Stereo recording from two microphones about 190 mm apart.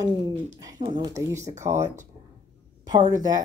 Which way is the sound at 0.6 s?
20° right (ahead or behind).